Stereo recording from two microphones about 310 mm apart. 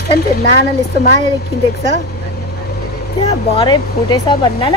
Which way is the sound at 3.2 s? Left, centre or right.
Centre.